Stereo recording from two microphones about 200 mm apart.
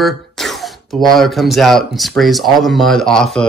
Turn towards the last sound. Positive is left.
turn(degrees=5)  # may be behind; listen again after turning